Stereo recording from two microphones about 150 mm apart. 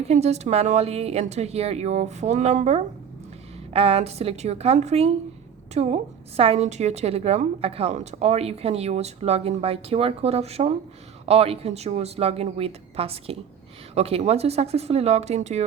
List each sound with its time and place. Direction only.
0.1 s a woman's voice: 45° right (ahead or behind)